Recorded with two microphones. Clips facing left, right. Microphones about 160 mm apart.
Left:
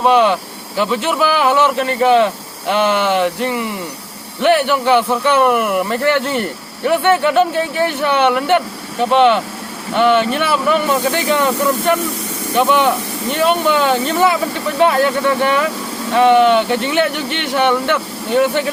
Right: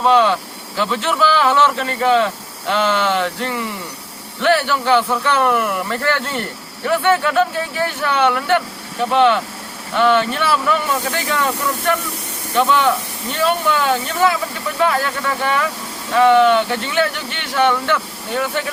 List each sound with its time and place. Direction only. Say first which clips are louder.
0.0 s speech: left 2 dB; 15° left (ahead or behind)